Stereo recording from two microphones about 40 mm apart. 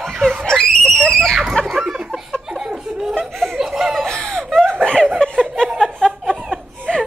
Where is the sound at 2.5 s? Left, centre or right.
Centre.